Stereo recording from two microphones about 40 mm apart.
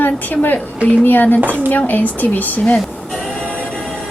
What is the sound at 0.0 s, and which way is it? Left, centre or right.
A woman's voice, left.